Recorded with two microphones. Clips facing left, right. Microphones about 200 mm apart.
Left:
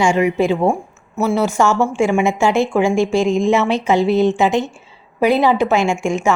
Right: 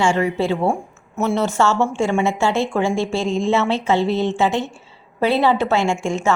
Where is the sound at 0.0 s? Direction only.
15° left (ahead or behind).